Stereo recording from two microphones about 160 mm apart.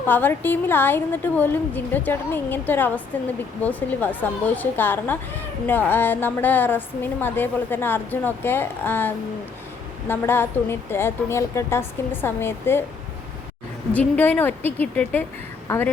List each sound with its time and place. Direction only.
0.1 s a woman's voice: 10° left (ahead or behind)
13.9 s a woman's voice: 10° left (ahead or behind)